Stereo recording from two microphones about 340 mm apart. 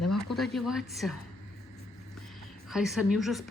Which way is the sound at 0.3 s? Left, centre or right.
Centre.